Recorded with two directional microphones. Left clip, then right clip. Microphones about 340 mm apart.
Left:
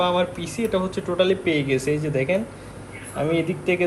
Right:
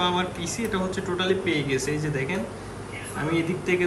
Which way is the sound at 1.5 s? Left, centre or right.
Left.